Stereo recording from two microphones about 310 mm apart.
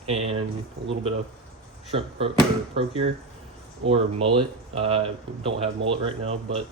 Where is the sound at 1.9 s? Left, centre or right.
Centre.